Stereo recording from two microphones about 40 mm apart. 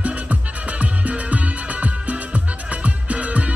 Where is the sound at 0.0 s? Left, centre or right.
Right.